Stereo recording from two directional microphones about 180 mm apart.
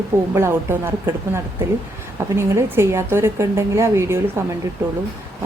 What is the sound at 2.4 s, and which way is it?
A woman's voice, 15° right (ahead or behind).